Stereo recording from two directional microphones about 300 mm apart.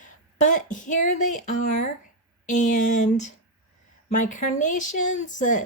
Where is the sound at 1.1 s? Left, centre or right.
Left.